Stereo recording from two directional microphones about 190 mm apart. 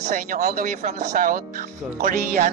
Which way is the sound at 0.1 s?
50° right (ahead or behind).